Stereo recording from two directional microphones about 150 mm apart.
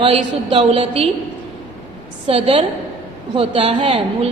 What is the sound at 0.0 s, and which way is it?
A woman's voice, 35° right (ahead or behind).